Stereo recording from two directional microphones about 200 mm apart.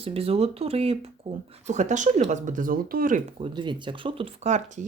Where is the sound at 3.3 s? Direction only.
25° right (ahead or behind).